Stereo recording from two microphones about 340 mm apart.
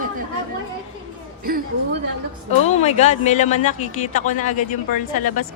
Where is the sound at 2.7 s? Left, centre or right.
Centre.